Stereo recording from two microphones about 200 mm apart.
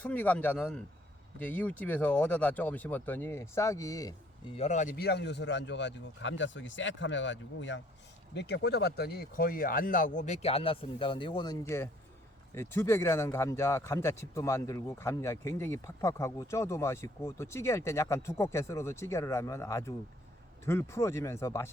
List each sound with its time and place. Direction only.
0.0 s speech: 5° left (ahead or behind)
4.5 s a man's voice: 35° left (ahead or behind)
11.6 s speech: 10° left (ahead or behind)